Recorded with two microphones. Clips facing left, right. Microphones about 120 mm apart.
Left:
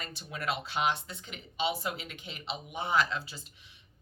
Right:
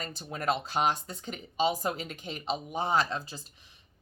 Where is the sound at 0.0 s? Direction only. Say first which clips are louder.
Right 4 dB; 40° right (ahead or behind).